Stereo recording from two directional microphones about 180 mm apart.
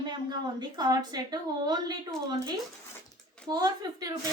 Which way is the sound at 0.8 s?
20° right (ahead or behind).